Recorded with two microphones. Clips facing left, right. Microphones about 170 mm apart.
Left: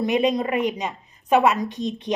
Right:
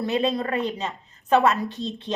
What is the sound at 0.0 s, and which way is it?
A woman's voice, 15° left (ahead or behind).